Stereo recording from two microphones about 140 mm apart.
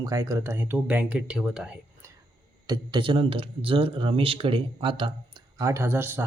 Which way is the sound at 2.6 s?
30° right (ahead or behind).